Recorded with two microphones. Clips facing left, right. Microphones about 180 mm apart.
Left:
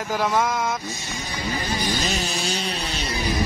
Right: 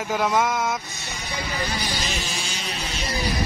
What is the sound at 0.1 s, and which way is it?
Speech, centre (ahead or behind).